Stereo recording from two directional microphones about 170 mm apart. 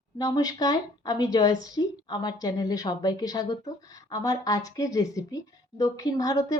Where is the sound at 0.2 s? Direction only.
20° left (ahead or behind).